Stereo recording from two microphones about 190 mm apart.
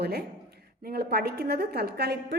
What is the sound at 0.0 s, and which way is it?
A woman's voice, 55° right (ahead or behind).